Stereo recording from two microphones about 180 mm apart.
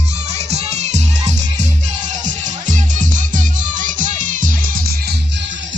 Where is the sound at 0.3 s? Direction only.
35° right (ahead or behind); by 5.1 s 55° right (ahead or behind).